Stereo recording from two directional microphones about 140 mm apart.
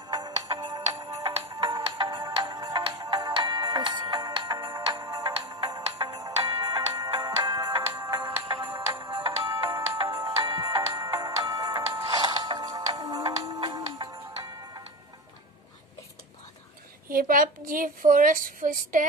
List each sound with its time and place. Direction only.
0.1 s music: 30° right (ahead or behind)
4.9 s music: 25° right (ahead or behind)
17.1 s a woman's voice: 90° right